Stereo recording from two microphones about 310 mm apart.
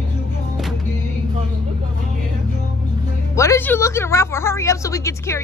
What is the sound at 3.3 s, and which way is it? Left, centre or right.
A woman's voice, centre.